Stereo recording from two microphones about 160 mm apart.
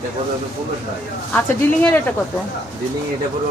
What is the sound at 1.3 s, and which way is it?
Speech, 10° left (ahead or behind).